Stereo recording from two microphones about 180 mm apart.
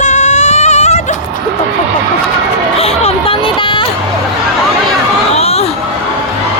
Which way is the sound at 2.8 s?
30° left (ahead or behind).